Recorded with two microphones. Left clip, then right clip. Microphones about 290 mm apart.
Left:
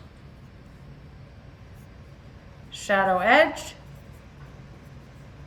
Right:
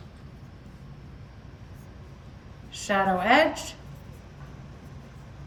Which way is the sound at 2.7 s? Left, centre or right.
Centre.